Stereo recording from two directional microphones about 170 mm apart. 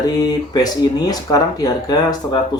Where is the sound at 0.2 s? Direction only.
25° left (ahead or behind).